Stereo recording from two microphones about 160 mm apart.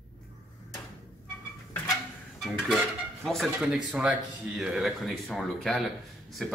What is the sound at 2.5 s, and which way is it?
Speech, 5° left (ahead or behind).